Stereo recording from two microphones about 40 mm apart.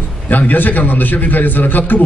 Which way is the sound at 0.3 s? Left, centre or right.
Left.